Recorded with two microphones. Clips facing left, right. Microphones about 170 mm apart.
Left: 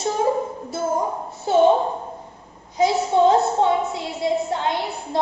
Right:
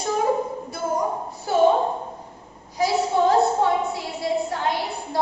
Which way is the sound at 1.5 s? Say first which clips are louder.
Left 4 dB; 25° left (ahead or behind).